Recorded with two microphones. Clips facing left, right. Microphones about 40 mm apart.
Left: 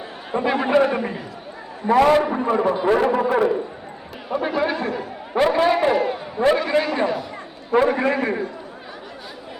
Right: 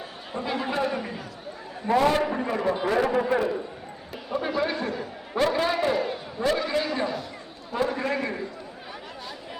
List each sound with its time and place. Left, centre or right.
0.3 s a man's voice: left
2.1 s a man's voice: left
4.3 s a man's voice: centre
7.7 s a man's voice: left